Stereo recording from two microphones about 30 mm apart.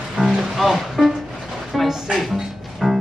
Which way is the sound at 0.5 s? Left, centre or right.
Centre.